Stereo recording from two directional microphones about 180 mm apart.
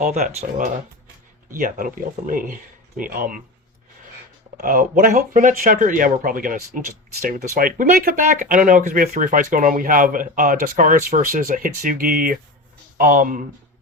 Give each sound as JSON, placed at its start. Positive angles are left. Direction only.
{"t": 0.0, "sound": "speech", "side_deg": -55}
{"t": 0.3, "sound": "speech", "side_deg": -40}
{"t": 1.5, "sound": "speech", "side_deg": -50}
{"t": 4.5, "sound": "speech", "side_deg": -50}